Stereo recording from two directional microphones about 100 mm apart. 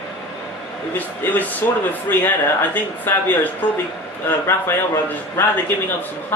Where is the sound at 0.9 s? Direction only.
15° left (ahead or behind).